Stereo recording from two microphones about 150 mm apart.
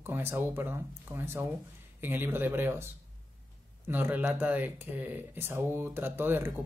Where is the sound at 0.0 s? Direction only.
15° right (ahead or behind).